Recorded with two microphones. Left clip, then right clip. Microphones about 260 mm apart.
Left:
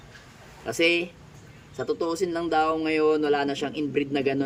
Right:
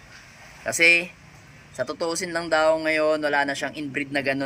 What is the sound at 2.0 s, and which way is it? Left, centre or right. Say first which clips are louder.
Speech: left 1 dB; right.